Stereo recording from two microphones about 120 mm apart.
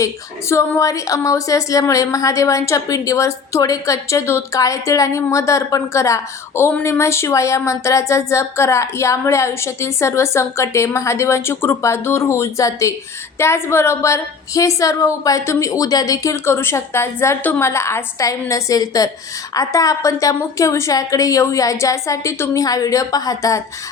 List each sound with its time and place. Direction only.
0.0 s a woman's voice: 25° left (ahead or behind)